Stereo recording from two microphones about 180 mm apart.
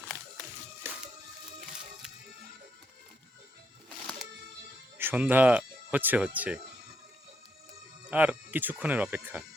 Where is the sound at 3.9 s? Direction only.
5° left (ahead or behind).